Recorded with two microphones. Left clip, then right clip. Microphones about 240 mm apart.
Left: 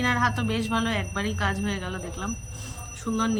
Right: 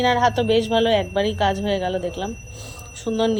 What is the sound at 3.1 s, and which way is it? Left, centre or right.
Speech, right.